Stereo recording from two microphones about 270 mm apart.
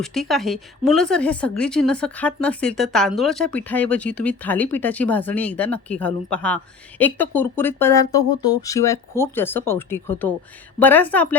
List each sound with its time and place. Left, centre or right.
0.0 s speech: centre